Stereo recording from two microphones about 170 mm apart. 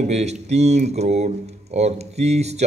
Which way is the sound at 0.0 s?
40° right (ahead or behind).